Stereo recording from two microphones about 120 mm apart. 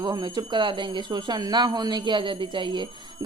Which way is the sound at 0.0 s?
35° right (ahead or behind).